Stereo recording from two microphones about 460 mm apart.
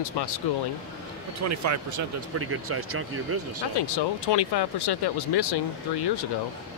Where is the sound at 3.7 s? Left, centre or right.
Left.